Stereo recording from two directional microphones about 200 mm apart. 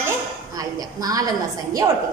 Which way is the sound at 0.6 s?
20° right (ahead or behind).